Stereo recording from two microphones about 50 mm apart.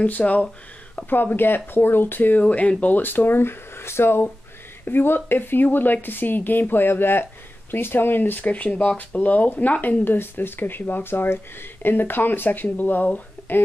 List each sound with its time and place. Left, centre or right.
0.0 s speech: left
1.1 s speech: left
2.4 s speech: left
2.8 s speech: left
10.1 s speech: left